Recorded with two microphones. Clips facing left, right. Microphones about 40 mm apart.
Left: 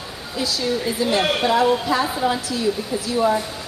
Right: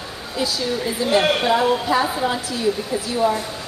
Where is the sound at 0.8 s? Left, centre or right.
Centre.